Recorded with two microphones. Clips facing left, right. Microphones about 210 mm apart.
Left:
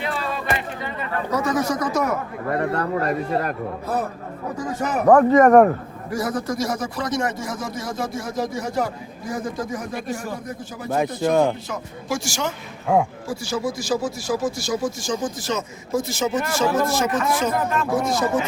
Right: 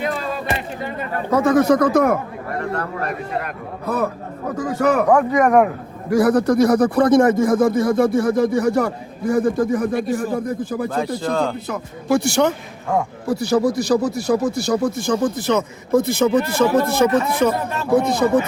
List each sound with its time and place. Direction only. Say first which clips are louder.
0.9 s a man's voice: right 5 dB; 55° right (ahead or behind)
4.5 s a man's voice: right 7 dB; 60° right (ahead or behind)
5.1 s speech: left 7 dB; 10° right (ahead or behind)
6.1 s a man's voice: right 10 dB; 60° right (ahead or behind)
10.8 s speech: left 5 dB; 20° left (ahead or behind)
11.7 s a man's voice: right 8 dB; 60° right (ahead or behind)